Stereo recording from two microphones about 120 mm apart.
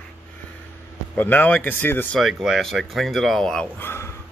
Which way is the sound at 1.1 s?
15° left (ahead or behind).